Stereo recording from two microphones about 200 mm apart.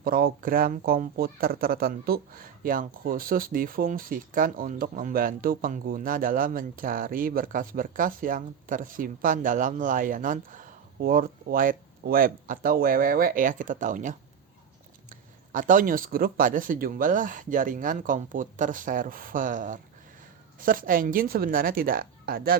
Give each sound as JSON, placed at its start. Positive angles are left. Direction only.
{"t": 0.0, "sound": "speech", "side_deg": -50}